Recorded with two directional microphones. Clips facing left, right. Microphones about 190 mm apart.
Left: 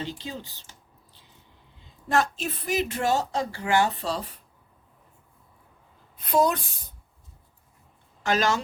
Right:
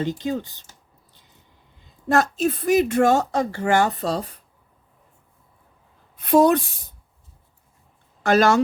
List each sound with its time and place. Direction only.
0.0 s speech: 50° right (ahead or behind)
2.0 s speech: 45° right (ahead or behind)
6.3 s speech: 55° right (ahead or behind)
8.2 s speech: 50° right (ahead or behind)